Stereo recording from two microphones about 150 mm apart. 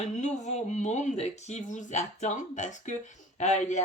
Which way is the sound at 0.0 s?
50° left (ahead or behind).